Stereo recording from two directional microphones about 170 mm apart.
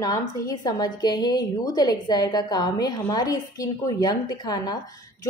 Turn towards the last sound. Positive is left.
turn(degrees=25)  # may be behind; listen again after turning